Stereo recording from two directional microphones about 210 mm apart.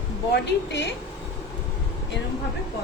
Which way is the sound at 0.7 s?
55° left (ahead or behind).